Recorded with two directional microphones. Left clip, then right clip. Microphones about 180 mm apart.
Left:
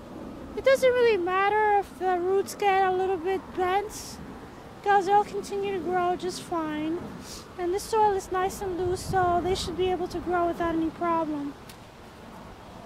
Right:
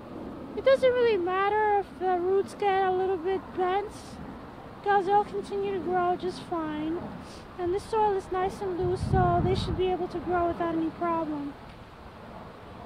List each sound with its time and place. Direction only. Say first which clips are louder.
0.6 s speech: left 1 dB; 30° left (ahead or behind)
4.8 s speech: left 2 dB; 30° left (ahead or behind)